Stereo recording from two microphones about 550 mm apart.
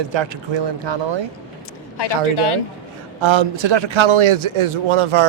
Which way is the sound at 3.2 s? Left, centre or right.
Right.